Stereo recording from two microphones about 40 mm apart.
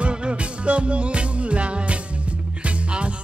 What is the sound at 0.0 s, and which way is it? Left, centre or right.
Music, right.